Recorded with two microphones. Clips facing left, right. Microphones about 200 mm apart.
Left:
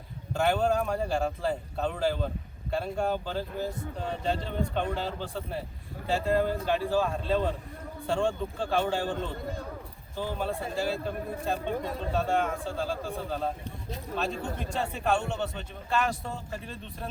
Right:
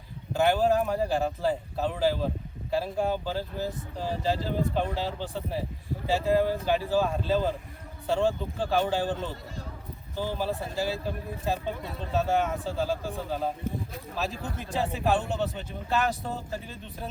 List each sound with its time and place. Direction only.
0.3 s speech: centre (ahead or behind)
10.3 s speech: centre (ahead or behind)